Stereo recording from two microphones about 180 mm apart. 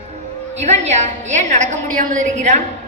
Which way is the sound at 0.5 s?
40° right (ahead or behind).